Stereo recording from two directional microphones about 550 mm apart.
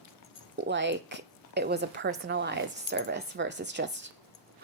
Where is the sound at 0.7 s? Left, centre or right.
Centre.